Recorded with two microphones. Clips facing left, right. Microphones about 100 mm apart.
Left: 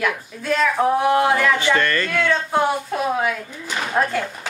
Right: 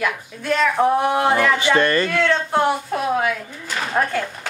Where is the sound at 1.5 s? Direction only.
20° right (ahead or behind).